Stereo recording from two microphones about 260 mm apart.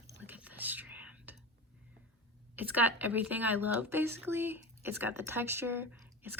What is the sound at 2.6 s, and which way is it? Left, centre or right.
Speech, centre.